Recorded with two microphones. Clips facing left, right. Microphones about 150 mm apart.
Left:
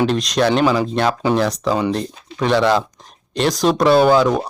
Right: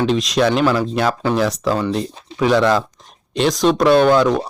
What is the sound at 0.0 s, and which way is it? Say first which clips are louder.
Speech: even; centre (ahead or behind).